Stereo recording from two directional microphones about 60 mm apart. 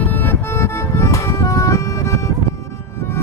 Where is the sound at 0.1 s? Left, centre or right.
Left.